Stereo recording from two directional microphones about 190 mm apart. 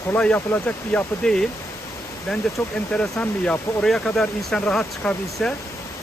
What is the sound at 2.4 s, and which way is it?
Speech, 5° left (ahead or behind).